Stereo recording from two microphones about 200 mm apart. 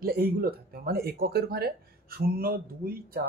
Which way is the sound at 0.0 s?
50° right (ahead or behind).